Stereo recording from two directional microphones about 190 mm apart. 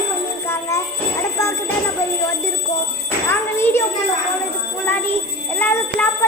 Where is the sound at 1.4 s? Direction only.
15° left (ahead or behind).